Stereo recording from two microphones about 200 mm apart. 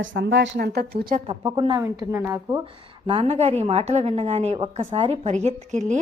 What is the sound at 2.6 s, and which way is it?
A woman's voice, 25° right (ahead or behind).